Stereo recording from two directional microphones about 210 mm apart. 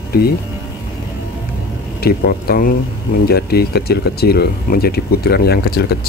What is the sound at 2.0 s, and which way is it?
Speech, 45° left (ahead or behind).